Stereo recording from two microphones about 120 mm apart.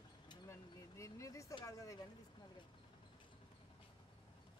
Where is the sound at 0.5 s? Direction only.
25° left (ahead or behind).